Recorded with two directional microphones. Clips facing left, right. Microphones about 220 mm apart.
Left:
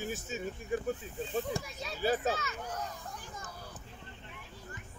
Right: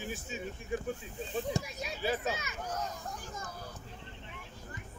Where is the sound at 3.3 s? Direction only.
45° right (ahead or behind).